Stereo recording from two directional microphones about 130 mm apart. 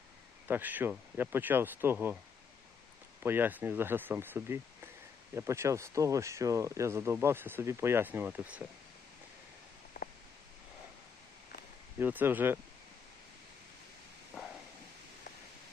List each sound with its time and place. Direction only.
0.4 s speech: 15° right (ahead or behind)
3.2 s speech: 15° right (ahead or behind)
10.0 s a sound: 90° left
11.9 s speech: 15° right (ahead or behind)
14.3 s walk: 5° right (ahead or behind)